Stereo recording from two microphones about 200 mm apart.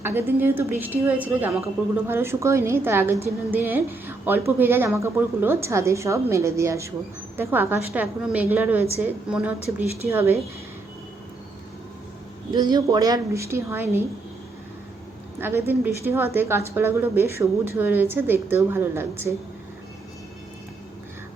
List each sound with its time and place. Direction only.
0.0 s a woman's voice: 10° right (ahead or behind)
12.5 s a woman's voice: 20° right (ahead or behind)
15.4 s a woman's voice: 10° right (ahead or behind)